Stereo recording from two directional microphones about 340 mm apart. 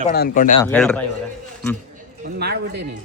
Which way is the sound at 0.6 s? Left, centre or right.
Centre.